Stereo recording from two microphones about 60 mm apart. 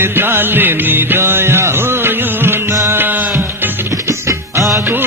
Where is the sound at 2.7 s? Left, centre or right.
Right.